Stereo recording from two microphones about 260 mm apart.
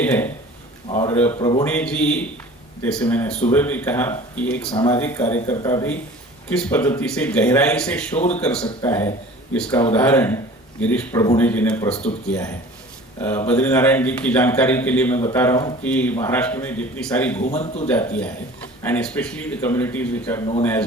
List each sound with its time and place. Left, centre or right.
0.0 s a man's voice: centre
17.4 s a man's voice: left
17.8 s speech: centre